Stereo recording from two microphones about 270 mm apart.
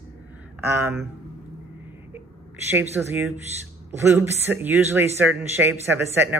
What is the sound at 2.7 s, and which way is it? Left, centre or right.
A man's voice, centre.